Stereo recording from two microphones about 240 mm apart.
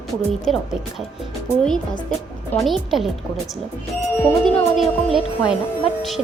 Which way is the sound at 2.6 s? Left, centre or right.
Centre.